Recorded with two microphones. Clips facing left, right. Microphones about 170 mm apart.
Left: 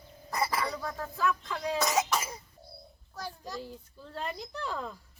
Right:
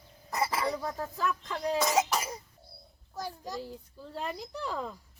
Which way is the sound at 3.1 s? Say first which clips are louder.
Right 2 dB; 15° right (ahead or behind).